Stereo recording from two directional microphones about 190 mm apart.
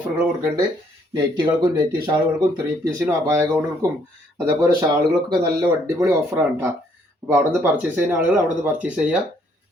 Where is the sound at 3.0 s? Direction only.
15° right (ahead or behind).